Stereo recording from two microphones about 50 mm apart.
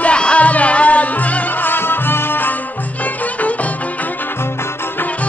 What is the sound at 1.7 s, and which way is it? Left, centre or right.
Music, left.